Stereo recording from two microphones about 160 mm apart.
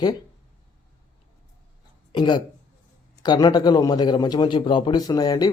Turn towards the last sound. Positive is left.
turn(degrees=25)  # may be behind; listen again after turning